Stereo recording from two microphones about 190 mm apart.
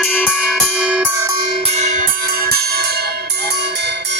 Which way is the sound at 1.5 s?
35° right (ahead or behind).